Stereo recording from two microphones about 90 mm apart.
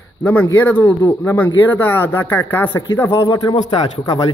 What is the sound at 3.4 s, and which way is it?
Speech, 55° left (ahead or behind).